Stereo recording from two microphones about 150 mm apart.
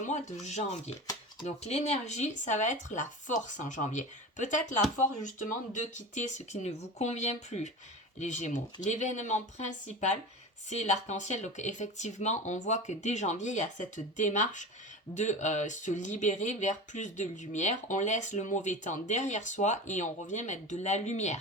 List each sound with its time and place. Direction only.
0.0 s speech: 50° left (ahead or behind)